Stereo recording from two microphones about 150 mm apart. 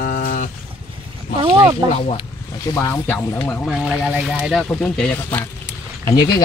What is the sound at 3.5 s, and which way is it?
Speech, centre (ahead or behind).